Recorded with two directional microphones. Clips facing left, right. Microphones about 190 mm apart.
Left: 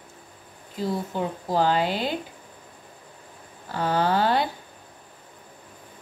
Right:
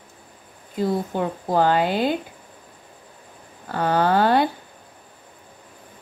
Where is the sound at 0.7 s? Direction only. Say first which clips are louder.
Right 4 dB; 55° right (ahead or behind).